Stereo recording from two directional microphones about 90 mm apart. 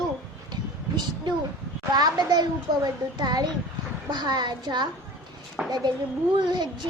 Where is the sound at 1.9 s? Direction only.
50° right (ahead or behind).